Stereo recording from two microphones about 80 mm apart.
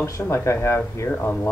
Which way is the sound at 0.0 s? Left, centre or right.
Left.